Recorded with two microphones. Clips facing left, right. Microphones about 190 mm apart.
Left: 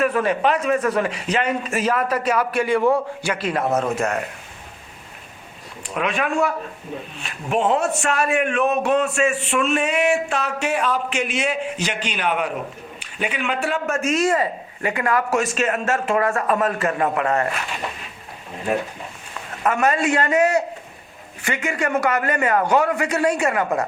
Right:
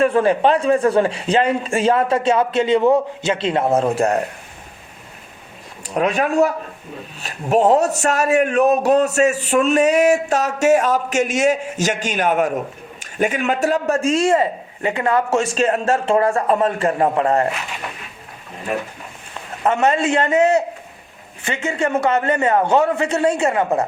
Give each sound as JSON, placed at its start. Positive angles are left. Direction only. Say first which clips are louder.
{"t": 0.0, "sound": "a man's voice", "louder": "right 4 dB", "side_deg": -30}
{"t": 5.9, "sound": "a man's voice", "louder": "right 5 dB", "side_deg": -40}
{"t": 19.6, "sound": "a man's voice", "louder": "right 2 dB", "side_deg": -25}